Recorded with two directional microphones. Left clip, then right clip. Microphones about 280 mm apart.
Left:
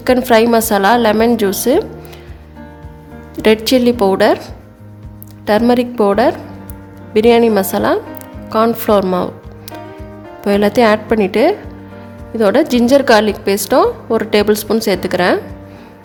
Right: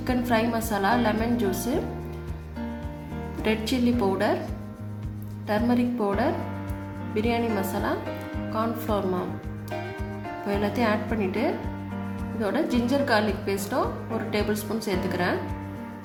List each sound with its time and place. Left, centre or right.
0.0 s a woman's voice: left
3.4 s a woman's voice: left
5.5 s a woman's voice: left
10.4 s a woman's voice: left